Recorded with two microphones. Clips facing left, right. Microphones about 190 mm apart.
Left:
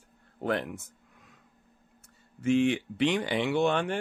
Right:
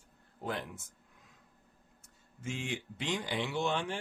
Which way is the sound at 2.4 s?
65° left (ahead or behind).